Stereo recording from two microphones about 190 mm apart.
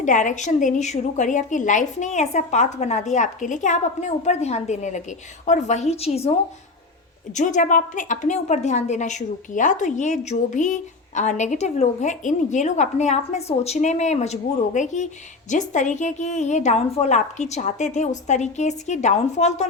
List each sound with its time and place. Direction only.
0.0 s a woman's voice: 40° left (ahead or behind)
7.3 s a woman's voice: 40° left (ahead or behind)